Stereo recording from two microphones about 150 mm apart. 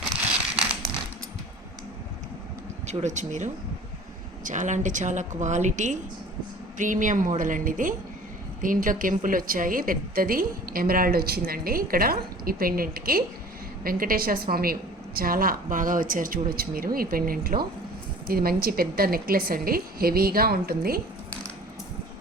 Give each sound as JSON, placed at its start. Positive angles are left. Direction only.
{"t": 2.8, "sound": "a woman's voice", "side_deg": -50}